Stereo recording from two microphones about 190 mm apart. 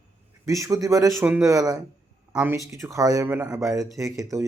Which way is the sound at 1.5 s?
20° right (ahead or behind).